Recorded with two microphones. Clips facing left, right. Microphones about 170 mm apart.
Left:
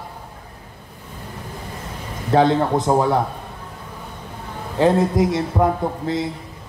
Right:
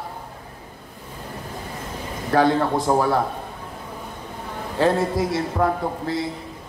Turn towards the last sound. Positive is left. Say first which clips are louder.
# left 2 dB
turn(degrees=20)  # may be behind; listen again after turning